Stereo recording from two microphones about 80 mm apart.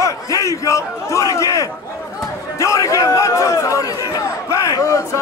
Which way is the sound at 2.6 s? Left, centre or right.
Left.